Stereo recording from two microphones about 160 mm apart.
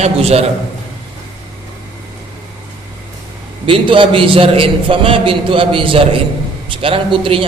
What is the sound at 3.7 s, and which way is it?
A man's voice, 30° right (ahead or behind).